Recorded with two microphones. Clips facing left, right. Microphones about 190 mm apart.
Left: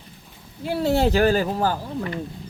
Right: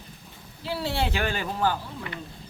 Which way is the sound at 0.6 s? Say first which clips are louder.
Left 8 dB; 45° left (ahead or behind).